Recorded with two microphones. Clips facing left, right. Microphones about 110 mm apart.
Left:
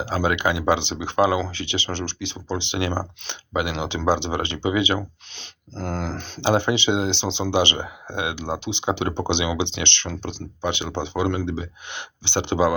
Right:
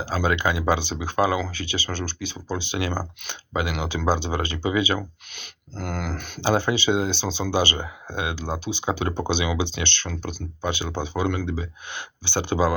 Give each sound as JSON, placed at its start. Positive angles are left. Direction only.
{"t": 0.0, "sound": "speech", "side_deg": 20}